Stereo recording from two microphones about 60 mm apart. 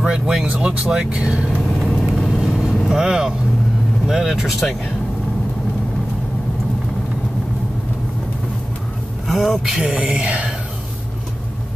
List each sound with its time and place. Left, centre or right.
0.0 s speech: centre
1.8 s vehicle: centre
2.9 s speech: centre
9.3 s speech: centre
9.8 s speech: centre